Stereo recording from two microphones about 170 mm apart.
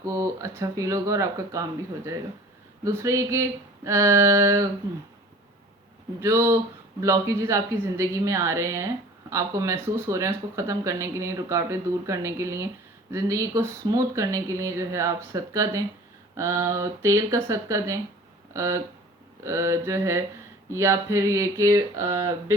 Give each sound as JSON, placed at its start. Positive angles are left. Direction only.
{"t": 0.0, "sound": "speech", "side_deg": -20}
{"t": 2.8, "sound": "speech", "side_deg": -15}
{"t": 6.1, "sound": "speech", "side_deg": -15}